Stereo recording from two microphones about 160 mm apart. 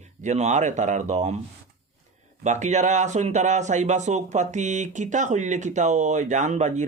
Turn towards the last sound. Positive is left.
turn(degrees=-45)  # may be behind; listen again after turning